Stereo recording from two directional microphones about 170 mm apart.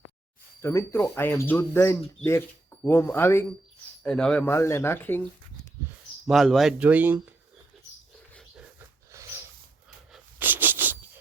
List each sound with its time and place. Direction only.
0.6 s speech: 15° left (ahead or behind)
4.0 s speech: 5° left (ahead or behind)
6.2 s speech: centre (ahead or behind)
9.1 s snort: 15° right (ahead or behind)
10.1 s a sound: 10° right (ahead or behind)